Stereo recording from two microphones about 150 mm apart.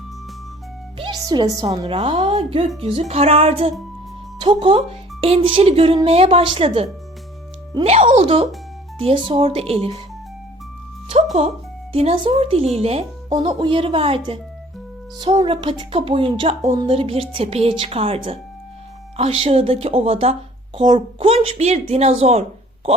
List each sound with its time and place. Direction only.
0.9 s a woman's voice: 30° right (ahead or behind)
7.9 s speech: 45° right (ahead or behind)
11.3 s speech: 40° right (ahead or behind)
15.4 s speech: 35° right (ahead or behind)